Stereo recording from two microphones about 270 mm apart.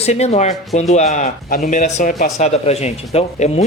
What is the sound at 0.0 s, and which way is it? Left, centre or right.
Speech, left.